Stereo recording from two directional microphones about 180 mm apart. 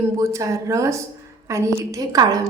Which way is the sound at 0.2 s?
15° right (ahead or behind).